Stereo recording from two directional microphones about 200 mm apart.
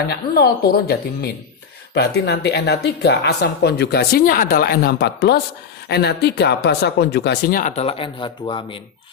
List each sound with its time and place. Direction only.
0.1 s speech: 50° left (ahead or behind); by 8.8 s 25° left (ahead or behind)